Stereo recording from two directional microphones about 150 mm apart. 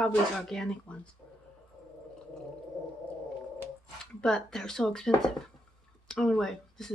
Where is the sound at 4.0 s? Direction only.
5° left (ahead or behind).